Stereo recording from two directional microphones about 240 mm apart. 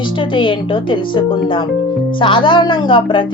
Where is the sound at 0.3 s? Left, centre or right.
Left.